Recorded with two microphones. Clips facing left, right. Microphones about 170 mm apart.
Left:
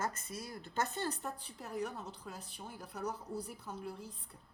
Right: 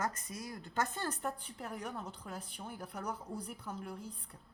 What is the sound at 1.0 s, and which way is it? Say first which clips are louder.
A woman's voice: right 1 dB; 55° right (ahead or behind).